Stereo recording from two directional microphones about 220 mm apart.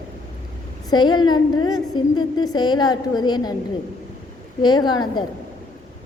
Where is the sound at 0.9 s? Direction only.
20° left (ahead or behind).